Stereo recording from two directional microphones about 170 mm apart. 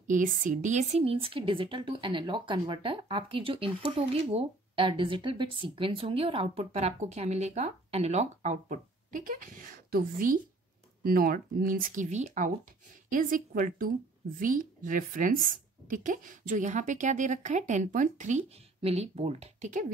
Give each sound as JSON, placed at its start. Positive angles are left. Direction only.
{"t": 0.0, "sound": "a woman's voice", "side_deg": -50}